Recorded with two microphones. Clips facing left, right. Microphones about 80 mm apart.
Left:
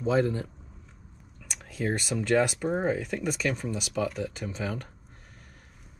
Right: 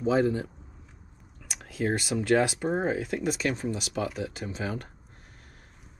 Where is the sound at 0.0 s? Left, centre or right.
Left.